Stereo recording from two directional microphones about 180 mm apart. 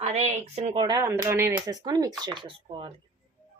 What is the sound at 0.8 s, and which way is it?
Speech, 20° right (ahead or behind).